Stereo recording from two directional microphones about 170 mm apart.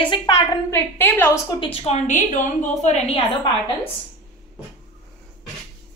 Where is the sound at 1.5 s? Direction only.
35° left (ahead or behind).